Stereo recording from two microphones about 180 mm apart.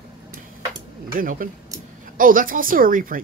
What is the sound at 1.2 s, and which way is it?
A woman's voice, 50° right (ahead or behind).